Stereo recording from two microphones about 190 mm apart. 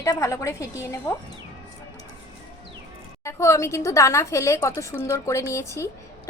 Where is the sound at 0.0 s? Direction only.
15° left (ahead or behind).